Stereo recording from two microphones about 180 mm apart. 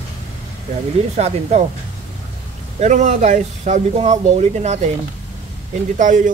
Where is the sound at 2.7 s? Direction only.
40° right (ahead or behind).